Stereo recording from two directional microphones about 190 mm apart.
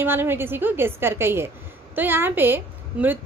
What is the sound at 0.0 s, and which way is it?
A woman's voice, 10° right (ahead or behind).